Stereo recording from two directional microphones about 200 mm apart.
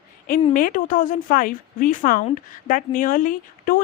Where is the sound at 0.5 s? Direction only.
45° left (ahead or behind).